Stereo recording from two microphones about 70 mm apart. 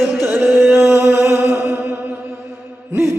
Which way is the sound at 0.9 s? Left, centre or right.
Right.